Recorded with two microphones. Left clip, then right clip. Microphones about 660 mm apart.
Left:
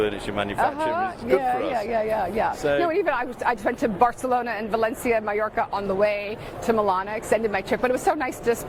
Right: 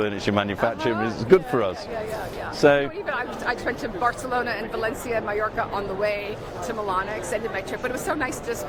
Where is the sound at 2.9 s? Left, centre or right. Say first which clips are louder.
Left 5 dB; left.